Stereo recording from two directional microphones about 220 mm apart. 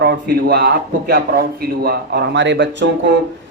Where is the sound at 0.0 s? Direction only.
45° right (ahead or behind).